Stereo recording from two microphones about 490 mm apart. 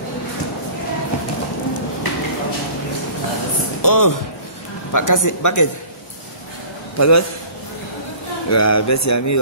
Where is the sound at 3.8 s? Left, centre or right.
Left.